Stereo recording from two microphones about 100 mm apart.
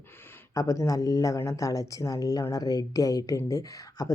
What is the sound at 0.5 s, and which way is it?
Speech, 35° left (ahead or behind).